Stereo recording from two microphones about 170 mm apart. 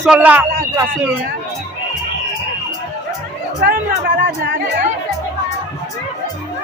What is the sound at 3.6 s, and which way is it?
Speech, 85° right.